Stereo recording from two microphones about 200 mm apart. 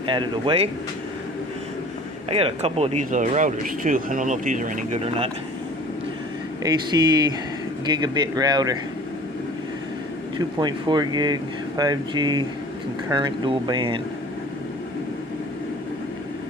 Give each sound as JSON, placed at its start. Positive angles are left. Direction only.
{"t": 0.0, "sound": "speech", "side_deg": -25}
{"t": 2.2, "sound": "speech", "side_deg": -30}
{"t": 6.6, "sound": "speech", "side_deg": -20}
{"t": 10.3, "sound": "speech", "side_deg": -20}